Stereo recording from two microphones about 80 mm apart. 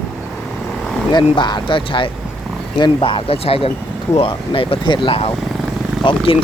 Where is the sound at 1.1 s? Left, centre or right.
Left.